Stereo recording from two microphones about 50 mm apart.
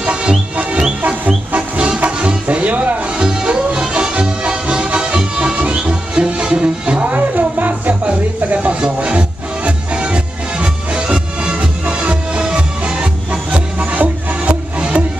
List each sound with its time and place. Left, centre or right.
0.0 s music: centre
1.0 s music: right
3.3 s music: centre